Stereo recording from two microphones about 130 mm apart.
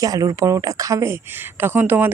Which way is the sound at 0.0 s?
25° right (ahead or behind).